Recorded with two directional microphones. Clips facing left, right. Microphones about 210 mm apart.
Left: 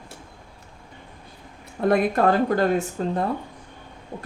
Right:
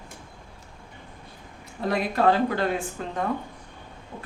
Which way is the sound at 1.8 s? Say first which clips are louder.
Left 4 dB; 50° left (ahead or behind).